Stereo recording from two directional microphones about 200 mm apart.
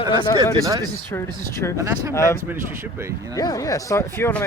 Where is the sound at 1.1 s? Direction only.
15° left (ahead or behind).